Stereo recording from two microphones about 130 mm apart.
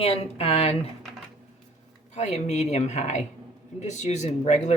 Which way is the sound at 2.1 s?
60° left (ahead or behind).